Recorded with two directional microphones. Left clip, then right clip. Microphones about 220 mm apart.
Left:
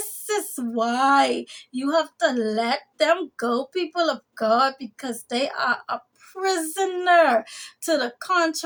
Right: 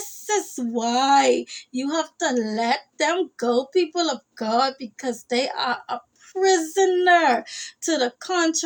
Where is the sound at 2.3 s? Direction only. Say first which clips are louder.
Right 1 dB; 10° left (ahead or behind).